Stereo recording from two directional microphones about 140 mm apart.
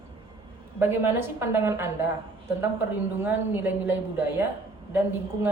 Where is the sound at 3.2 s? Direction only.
15° right (ahead or behind).